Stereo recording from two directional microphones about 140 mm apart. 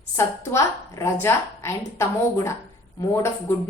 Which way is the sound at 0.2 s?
20° left (ahead or behind).